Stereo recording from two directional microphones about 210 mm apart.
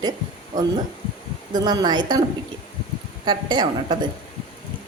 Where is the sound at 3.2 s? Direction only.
20° right (ahead or behind).